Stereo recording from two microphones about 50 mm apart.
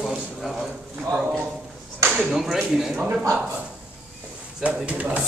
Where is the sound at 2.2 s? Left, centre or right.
Centre.